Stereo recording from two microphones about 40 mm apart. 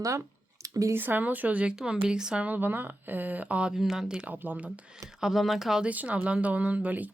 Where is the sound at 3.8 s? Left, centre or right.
Centre.